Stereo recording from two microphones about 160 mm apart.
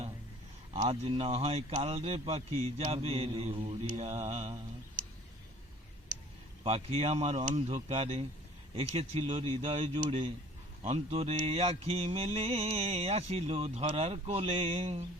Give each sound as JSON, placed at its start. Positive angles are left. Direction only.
{"t": 0.7, "sound": "mantra", "side_deg": -35}
{"t": 6.7, "sound": "mantra", "side_deg": -40}